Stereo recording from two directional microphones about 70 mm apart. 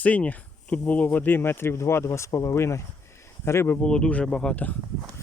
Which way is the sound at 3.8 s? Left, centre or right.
Centre.